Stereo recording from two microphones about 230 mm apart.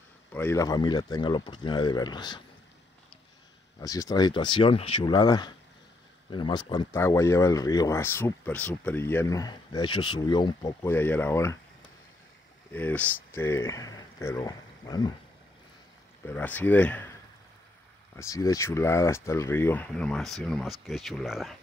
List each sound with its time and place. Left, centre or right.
0.3 s speech: centre
3.8 s speech: centre
12.7 s speech: centre
16.3 s speech: centre
18.1 s speech: centre